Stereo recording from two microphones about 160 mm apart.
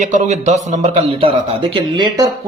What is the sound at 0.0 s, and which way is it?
A man's voice, 50° right (ahead or behind).